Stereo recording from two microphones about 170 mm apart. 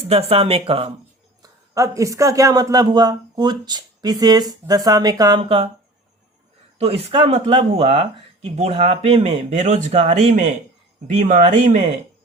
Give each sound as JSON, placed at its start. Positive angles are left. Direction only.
{"t": 0.0, "sound": "speech", "side_deg": -35}
{"t": 1.4, "sound": "speech", "side_deg": -20}
{"t": 6.7, "sound": "speech", "side_deg": -35}